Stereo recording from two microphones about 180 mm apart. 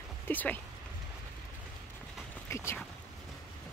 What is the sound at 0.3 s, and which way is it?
Speech, 10° left (ahead or behind).